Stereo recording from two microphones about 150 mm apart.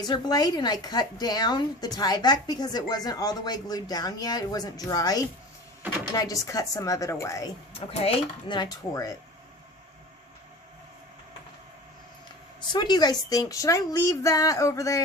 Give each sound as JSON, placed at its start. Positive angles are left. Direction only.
{"t": 0.0, "sound": "a woman's voice", "side_deg": 25}
{"t": 7.7, "sound": "speech", "side_deg": 40}
{"t": 12.5, "sound": "a woman's voice", "side_deg": 30}